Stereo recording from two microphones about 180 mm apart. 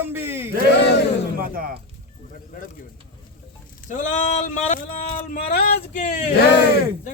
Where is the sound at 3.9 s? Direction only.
45° left (ahead or behind).